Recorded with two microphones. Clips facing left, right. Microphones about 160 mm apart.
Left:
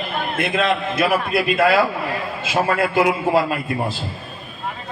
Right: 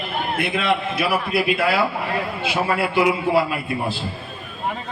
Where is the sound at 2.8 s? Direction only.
45° left (ahead or behind).